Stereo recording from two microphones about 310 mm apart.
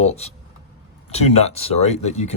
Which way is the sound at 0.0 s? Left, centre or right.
Left.